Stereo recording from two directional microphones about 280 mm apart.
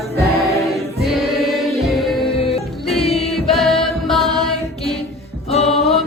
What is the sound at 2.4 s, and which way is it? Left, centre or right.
Music, left.